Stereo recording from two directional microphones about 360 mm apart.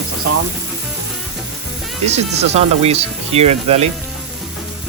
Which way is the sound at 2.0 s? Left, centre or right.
Centre.